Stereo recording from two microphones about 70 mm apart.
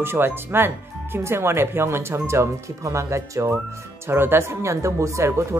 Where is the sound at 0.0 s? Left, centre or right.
Right.